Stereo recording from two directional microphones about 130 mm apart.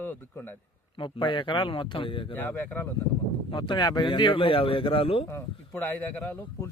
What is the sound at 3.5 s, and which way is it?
Speech, 35° left (ahead or behind).